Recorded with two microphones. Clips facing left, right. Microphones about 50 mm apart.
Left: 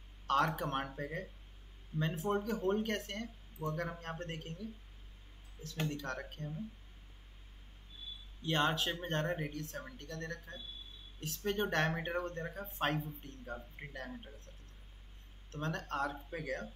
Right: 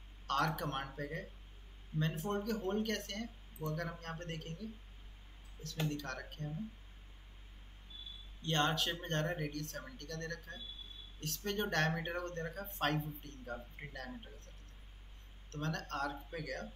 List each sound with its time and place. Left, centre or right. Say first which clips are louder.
0.3 s speech: left 3 dB; centre
5.9 s speech: left 2 dB; left
8.5 s speech: left 1 dB; centre
15.5 s speech: left 2 dB; centre